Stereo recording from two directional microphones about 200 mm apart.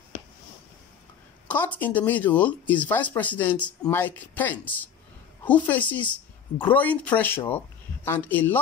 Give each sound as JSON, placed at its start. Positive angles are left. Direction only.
{"t": 1.5, "sound": "speech", "side_deg": 10}